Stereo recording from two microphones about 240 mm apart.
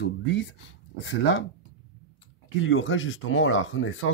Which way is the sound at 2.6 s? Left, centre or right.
Left.